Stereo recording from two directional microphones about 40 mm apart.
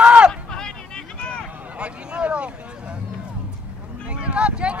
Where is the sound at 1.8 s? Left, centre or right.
Right.